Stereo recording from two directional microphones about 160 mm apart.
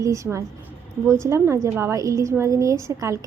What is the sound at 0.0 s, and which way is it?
A woman's voice, 20° right (ahead or behind).